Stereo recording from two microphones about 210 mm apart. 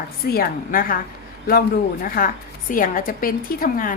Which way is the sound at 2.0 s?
40° left (ahead or behind).